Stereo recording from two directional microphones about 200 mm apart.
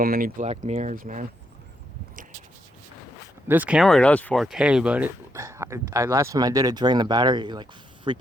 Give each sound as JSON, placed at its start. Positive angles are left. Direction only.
{"t": 0.0, "sound": "speech", "side_deg": -45}
{"t": 3.5, "sound": "speech", "side_deg": -5}